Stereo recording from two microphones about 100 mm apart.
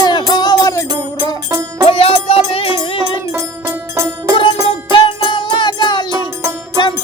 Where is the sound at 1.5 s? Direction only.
45° right (ahead or behind).